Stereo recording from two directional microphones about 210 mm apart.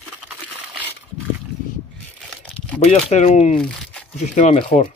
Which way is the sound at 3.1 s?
35° left (ahead or behind).